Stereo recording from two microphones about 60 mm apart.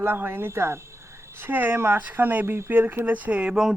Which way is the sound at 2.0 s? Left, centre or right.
Right.